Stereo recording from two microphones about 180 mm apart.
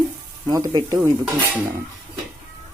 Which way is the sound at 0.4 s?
20° right (ahead or behind).